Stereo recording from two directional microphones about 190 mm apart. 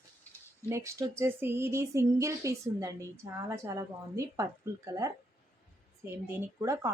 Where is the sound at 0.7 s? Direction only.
15° right (ahead or behind).